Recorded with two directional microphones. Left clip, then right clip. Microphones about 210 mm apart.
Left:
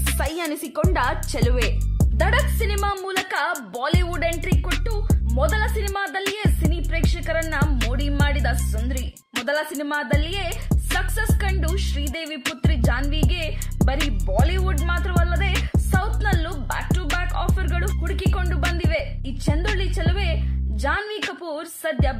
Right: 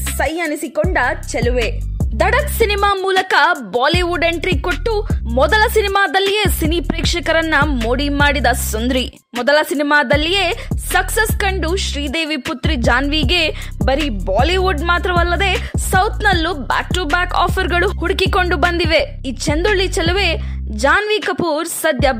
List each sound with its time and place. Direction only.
0.2 s a woman's voice: 20° right (ahead or behind)
2.1 s speech: 40° right (ahead or behind)
13.8 s music: centre (ahead or behind)
14.2 s speech: 45° right (ahead or behind)